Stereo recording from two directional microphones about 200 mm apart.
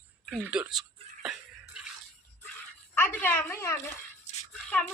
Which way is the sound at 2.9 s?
10° left (ahead or behind).